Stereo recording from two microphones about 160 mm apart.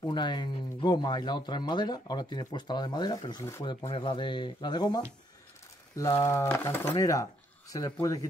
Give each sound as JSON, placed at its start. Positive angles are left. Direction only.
{"t": 0.0, "sound": "speech", "side_deg": 30}
{"t": 3.6, "sound": "speech", "side_deg": 30}